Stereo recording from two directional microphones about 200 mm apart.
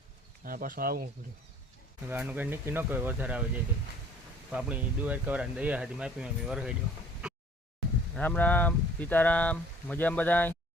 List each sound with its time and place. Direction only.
0.4 s speech: 45° right (ahead or behind)
2.0 s speech: 10° right (ahead or behind)
4.5 s speech: 5° right (ahead or behind)
8.1 s speech: 5° left (ahead or behind)